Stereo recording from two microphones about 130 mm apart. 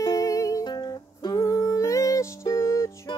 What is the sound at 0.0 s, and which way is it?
Music, 25° left (ahead or behind).